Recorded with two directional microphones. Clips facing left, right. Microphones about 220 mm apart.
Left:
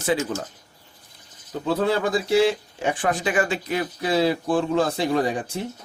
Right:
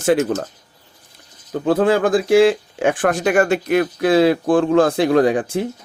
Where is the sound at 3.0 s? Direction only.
70° right (ahead or behind).